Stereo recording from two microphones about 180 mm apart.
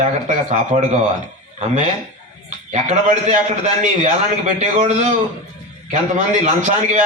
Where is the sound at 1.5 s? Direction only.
40° right (ahead or behind).